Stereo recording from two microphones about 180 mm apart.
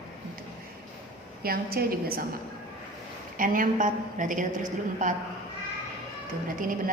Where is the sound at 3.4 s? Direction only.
45° right (ahead or behind).